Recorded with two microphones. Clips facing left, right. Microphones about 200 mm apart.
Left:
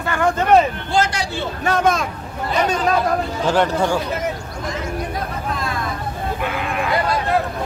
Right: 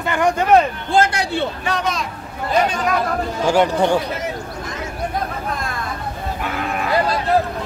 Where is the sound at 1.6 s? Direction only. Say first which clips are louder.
Left 5 dB; 50° left (ahead or behind).